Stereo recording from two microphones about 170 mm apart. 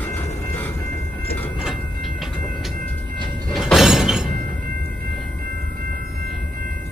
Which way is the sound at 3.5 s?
Centre (ahead or behind).